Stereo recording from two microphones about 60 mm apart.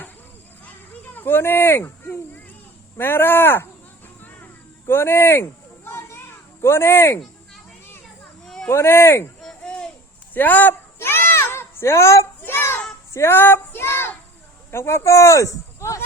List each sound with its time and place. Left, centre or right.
0.6 s a sound: left
3.0 s speech: left
4.2 s music: left
4.9 s speech: left
6.1 s children playing: left
8.7 s speech: left
10.3 s a sound: left
12.5 s children playing: left
13.3 s child singing: left
14.7 s speech: left